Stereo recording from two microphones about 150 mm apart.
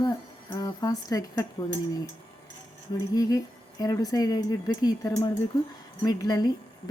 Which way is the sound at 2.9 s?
25° left (ahead or behind).